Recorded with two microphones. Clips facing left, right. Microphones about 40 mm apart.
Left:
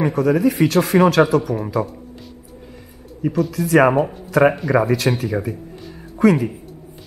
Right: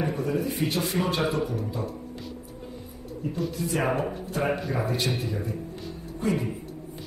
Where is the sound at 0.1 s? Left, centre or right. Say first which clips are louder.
Left 11 dB; left.